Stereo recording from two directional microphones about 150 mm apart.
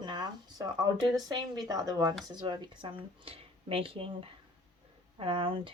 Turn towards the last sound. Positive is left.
turn(degrees=-35)  # may be behind; listen again after turning